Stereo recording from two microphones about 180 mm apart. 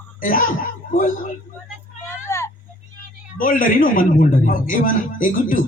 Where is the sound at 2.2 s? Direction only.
15° left (ahead or behind).